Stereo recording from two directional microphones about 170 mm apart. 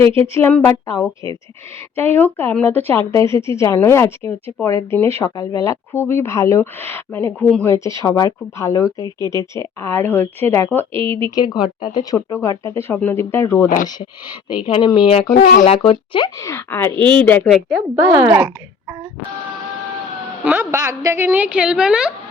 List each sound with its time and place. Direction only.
0.2 s speech: 15° left (ahead or behind)
9.0 s speech: 25° right (ahead or behind)
9.3 s speech: 15° left (ahead or behind)
10.9 s speech: 30° right (ahead or behind)
11.3 s speech: 25° left (ahead or behind)
13.8 s speech: 30° left (ahead or behind)
15.4 s speech: 50° left (ahead or behind)
15.7 s speech: 30° left (ahead or behind); by 17.8 s centre (ahead or behind)
17.9 s a woman's voice: 15° right (ahead or behind)
20.4 s a woman's voice: 10° right (ahead or behind)